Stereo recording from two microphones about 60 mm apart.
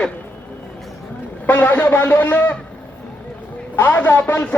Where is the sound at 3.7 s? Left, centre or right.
Left.